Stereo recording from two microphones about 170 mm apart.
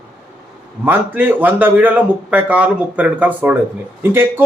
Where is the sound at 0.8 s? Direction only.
10° right (ahead or behind).